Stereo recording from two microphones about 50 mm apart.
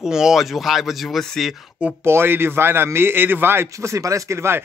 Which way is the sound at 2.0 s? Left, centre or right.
Right.